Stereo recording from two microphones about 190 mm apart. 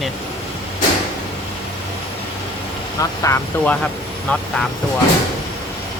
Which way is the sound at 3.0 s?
15° left (ahead or behind).